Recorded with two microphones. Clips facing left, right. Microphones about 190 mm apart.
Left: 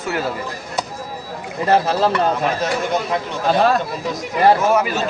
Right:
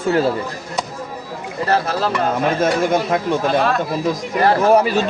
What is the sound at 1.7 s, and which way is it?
Speech, 20° left (ahead or behind).